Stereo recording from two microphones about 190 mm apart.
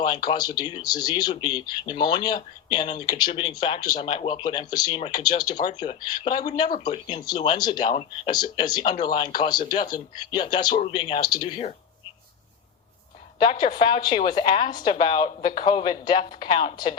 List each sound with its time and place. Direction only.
0.0 s speech: 25° left (ahead or behind)
13.4 s speech: 25° left (ahead or behind)